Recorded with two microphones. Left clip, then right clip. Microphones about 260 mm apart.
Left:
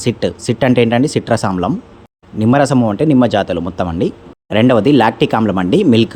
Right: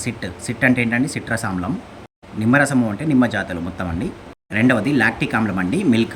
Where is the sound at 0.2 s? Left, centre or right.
Centre.